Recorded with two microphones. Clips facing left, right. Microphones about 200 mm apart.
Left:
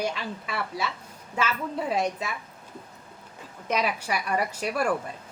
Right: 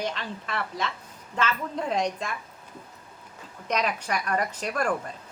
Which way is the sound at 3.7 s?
10° left (ahead or behind).